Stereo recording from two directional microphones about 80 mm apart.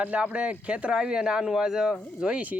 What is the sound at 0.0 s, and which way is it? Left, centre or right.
Speech, centre.